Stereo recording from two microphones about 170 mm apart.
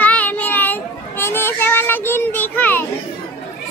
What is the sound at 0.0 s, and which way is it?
Children playing, 10° left (ahead or behind).